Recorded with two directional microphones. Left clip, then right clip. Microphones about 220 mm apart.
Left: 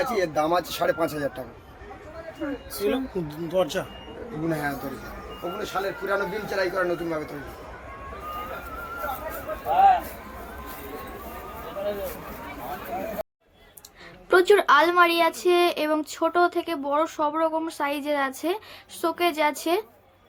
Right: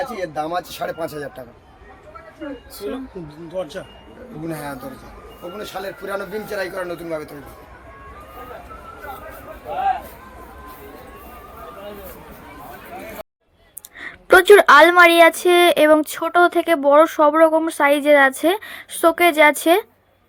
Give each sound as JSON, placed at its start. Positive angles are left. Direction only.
{"t": 0.0, "sound": "speech", "side_deg": -10}
{"t": 2.8, "sound": "speech", "side_deg": 30}
{"t": 5.5, "sound": "speech", "side_deg": -50}
{"t": 14.0, "sound": "a woman's voice", "side_deg": -25}